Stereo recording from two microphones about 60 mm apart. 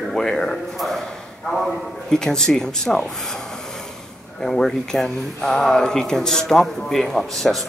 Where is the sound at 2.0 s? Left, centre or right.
Centre.